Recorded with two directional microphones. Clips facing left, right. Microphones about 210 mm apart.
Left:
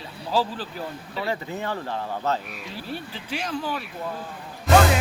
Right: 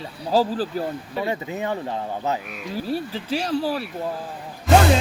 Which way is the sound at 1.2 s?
20° right (ahead or behind).